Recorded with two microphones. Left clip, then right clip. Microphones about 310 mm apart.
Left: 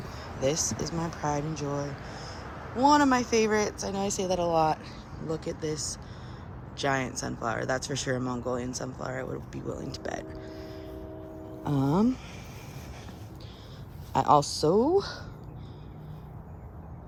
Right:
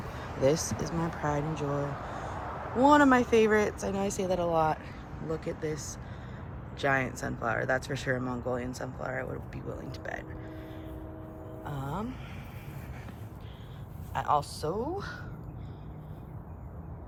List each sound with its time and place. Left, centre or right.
0.4 s speech: centre
2.8 s speech: centre
14.1 s speech: centre